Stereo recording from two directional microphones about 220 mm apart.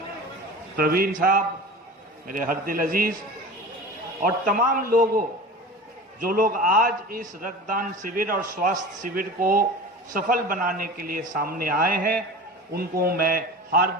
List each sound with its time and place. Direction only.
0.8 s a man's voice: 45° right (ahead or behind)
4.2 s a man's voice: 35° right (ahead or behind)